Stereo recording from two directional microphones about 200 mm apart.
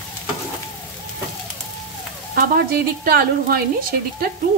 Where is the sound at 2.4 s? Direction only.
50° right (ahead or behind).